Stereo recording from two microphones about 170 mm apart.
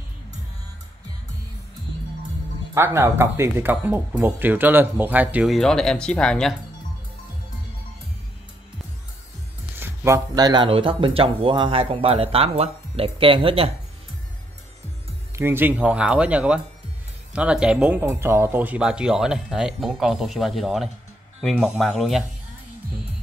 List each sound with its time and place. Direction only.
2.7 s speech: 15° right (ahead or behind); by 6.5 s 5° left (ahead or behind)
9.8 s speech: 15° right (ahead or behind); by 13.7 s 35° right (ahead or behind)
15.3 s speech: 15° right (ahead or behind)